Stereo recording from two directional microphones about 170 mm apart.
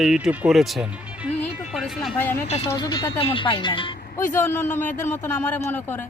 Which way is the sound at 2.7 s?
20° left (ahead or behind).